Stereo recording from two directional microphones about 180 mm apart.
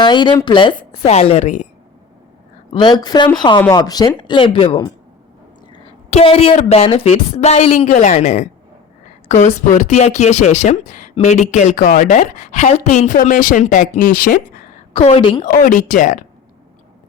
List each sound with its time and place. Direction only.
0.0 s a woman's voice: 25° left (ahead or behind)
2.7 s a woman's voice: 25° left (ahead or behind)
5.7 s a sound: 35° left (ahead or behind)
6.6 s a woman's voice: 35° left (ahead or behind); by 14.3 s 50° left (ahead or behind)
14.9 s a woman's voice: 30° left (ahead or behind)
15.4 s speech: 50° left (ahead or behind)